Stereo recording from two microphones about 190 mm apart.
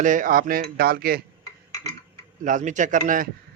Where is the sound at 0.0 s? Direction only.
45° right (ahead or behind).